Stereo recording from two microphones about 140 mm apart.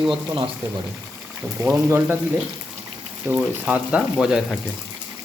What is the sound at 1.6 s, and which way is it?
Speech, 20° right (ahead or behind).